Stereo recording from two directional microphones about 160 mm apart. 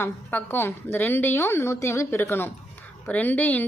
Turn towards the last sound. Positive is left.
turn(degrees=10)  # may be behind; listen again after turning